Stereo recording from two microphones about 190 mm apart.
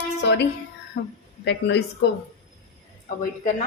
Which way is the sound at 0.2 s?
65° left (ahead or behind).